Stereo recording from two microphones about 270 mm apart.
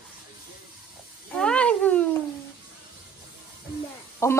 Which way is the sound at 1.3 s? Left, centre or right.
Centre.